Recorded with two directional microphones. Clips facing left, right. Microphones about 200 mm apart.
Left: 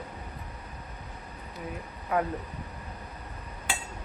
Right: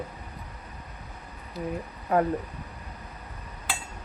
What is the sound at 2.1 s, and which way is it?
Speech, 35° right (ahead or behind).